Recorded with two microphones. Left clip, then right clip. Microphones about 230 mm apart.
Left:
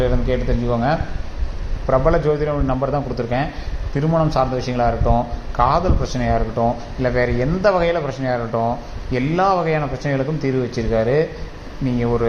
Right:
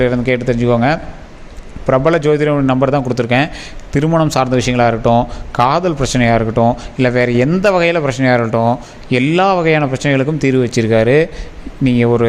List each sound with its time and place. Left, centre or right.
0.0 s a man's voice: right